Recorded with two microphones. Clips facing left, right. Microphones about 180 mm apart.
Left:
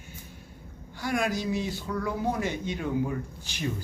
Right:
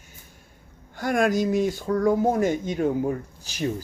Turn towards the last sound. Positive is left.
turn(degrees=-40)  # may be behind; listen again after turning